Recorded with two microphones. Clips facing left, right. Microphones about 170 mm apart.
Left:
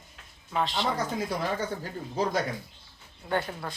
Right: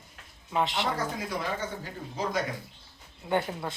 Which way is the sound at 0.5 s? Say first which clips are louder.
Even; 20° right (ahead or behind).